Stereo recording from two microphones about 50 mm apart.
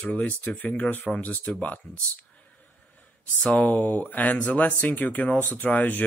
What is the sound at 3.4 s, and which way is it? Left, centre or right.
Speech, left.